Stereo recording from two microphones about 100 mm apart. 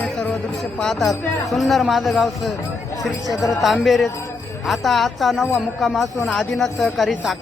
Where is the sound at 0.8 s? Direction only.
Centre (ahead or behind).